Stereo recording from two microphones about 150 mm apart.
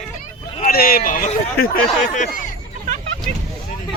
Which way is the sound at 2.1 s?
55° left (ahead or behind).